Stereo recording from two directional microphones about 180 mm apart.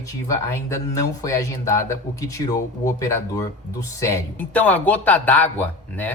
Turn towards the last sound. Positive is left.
turn(degrees=10)  # may be behind; listen again after turning